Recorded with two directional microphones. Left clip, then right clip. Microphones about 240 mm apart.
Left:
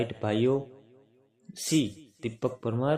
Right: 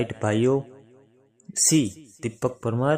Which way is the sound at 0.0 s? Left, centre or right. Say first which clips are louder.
Right 4 dB; centre.